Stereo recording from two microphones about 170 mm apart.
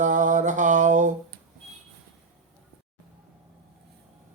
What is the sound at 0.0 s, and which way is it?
Mantra, 50° right (ahead or behind).